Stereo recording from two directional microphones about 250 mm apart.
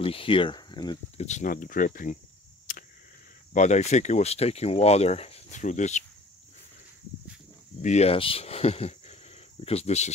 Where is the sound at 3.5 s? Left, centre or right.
Left.